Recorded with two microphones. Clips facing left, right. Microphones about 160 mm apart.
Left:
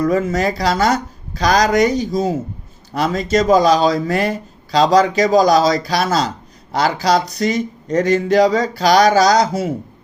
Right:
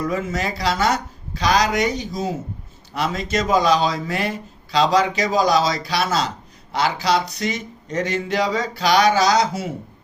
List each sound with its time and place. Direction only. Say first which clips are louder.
0.0 s a man's voice: left 7 dB; 40° left (ahead or behind)